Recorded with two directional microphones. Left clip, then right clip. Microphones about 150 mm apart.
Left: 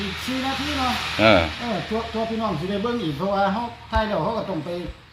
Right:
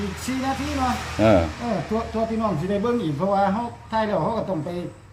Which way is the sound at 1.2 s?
5° right (ahead or behind).